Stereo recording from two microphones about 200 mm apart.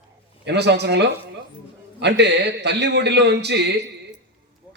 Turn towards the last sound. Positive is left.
turn(degrees=-55)  # may be behind; listen again after turning